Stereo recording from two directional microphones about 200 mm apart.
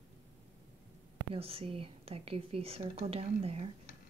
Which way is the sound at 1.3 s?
30° right (ahead or behind).